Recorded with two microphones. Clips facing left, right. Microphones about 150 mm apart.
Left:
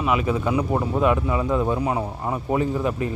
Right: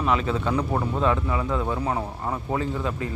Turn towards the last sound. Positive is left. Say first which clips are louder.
# left 4 dB
turn(degrees=20)  # may be behind; listen again after turning